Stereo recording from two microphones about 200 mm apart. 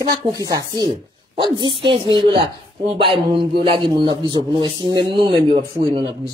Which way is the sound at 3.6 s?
25° right (ahead or behind).